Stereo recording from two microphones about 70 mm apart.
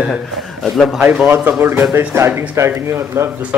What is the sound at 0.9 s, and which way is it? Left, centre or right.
Speech, centre.